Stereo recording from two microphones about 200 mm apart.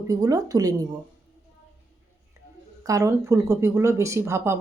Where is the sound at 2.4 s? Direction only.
15° right (ahead or behind).